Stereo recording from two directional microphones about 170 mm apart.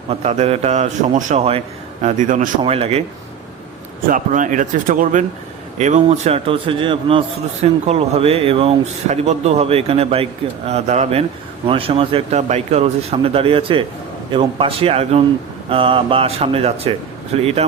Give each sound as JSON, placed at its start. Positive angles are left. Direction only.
{"t": 0.1, "sound": "a man's voice", "side_deg": -40}
{"t": 2.6, "sound": "a man's voice", "side_deg": -35}
{"t": 4.1, "sound": "a man's voice", "side_deg": -50}